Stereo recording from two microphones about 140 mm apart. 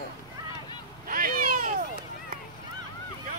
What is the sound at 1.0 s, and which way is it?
Cat, 90° right.